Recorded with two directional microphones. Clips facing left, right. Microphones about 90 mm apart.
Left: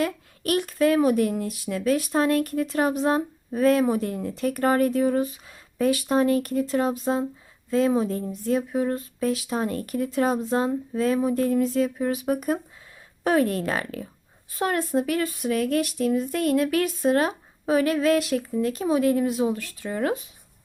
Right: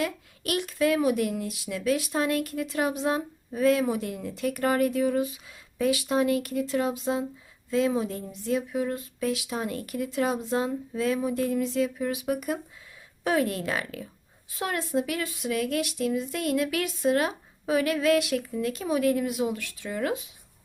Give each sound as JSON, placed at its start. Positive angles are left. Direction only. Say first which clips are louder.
{"t": 0.0, "sound": "speech", "louder": "left 4 dB", "side_deg": 40}